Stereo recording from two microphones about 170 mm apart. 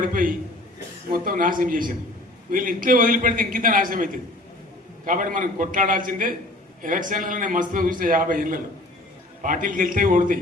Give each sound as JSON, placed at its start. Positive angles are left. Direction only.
{"t": 0.0, "sound": "a man's voice", "side_deg": -55}